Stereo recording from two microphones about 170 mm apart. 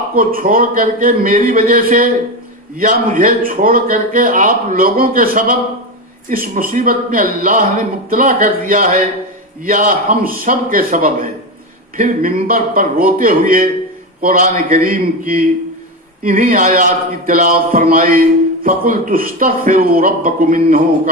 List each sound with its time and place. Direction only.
0.2 s a man's voice: 55° right (ahead or behind)